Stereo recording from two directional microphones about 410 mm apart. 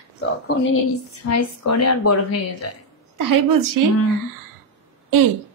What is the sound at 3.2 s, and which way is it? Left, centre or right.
Speech, right.